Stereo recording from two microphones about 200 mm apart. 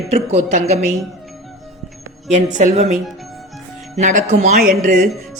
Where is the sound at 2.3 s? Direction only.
35° right (ahead or behind).